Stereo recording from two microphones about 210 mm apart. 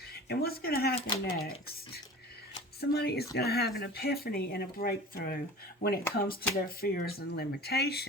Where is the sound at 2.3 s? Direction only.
50° left (ahead or behind).